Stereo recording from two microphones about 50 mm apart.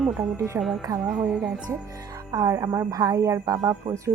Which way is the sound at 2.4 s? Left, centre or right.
Right.